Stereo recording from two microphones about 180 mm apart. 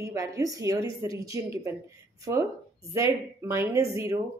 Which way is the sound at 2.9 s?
15° right (ahead or behind).